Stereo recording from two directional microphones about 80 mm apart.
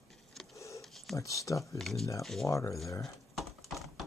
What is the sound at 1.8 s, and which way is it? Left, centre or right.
Speech, centre.